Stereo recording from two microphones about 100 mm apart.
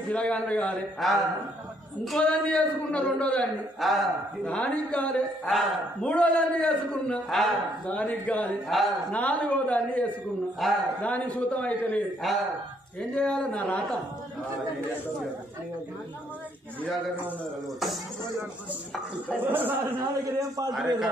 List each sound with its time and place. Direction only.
0.1 s a man's voice: 10° left (ahead or behind)
1.0 s a man's voice: centre (ahead or behind)
3.8 s a man's voice: centre (ahead or behind)
4.6 s a man's voice: 10° left (ahead or behind)
7.9 s a man's voice: 10° left (ahead or behind)
8.6 s a man's voice: centre (ahead or behind)
9.1 s a man's voice: 15° left (ahead or behind)
10.6 s a man's voice: centre (ahead or behind)
11.0 s a man's voice: 15° left (ahead or behind)
13.1 s a man's voice: 10° left (ahead or behind)
19.5 s a man's voice: 20° right (ahead or behind)
20.3 s a man's voice: 35° right (ahead or behind)